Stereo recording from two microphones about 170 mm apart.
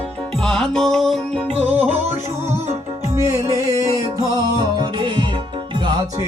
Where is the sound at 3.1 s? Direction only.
20° right (ahead or behind).